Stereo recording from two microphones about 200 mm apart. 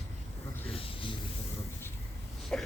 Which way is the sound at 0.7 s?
25° left (ahead or behind).